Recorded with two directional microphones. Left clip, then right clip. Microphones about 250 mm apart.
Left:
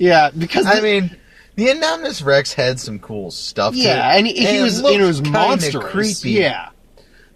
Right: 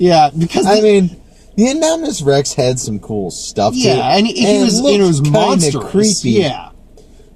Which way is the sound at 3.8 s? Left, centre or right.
Left.